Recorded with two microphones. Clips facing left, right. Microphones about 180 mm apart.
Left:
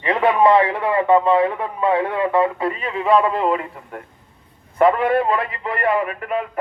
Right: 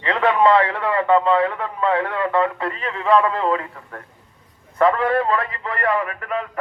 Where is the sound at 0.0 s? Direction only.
15° left (ahead or behind).